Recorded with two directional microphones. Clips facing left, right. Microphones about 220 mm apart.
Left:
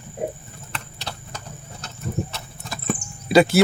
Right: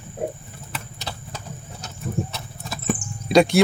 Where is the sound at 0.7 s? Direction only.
5° right (ahead or behind).